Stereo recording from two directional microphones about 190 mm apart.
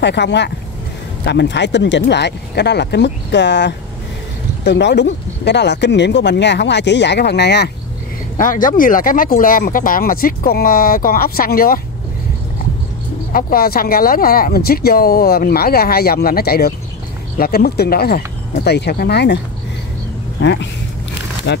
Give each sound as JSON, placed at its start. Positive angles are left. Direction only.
{"t": 0.0, "sound": "speech", "side_deg": 65}
{"t": 8.4, "sound": "speech", "side_deg": 45}
{"t": 13.3, "sound": "speech", "side_deg": 50}